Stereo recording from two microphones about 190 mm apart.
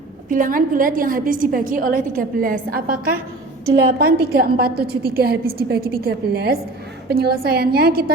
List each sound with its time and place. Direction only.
0.3 s a woman's voice: 45° right (ahead or behind)